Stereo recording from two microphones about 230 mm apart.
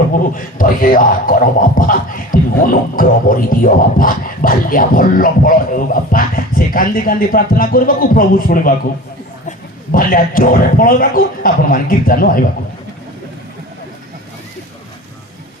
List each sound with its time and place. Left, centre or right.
0.3 s speech: left